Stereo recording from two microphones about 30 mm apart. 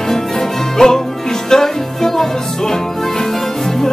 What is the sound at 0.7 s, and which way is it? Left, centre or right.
Music, centre.